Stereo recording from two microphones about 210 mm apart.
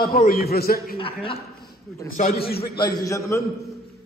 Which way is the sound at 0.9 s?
25° left (ahead or behind).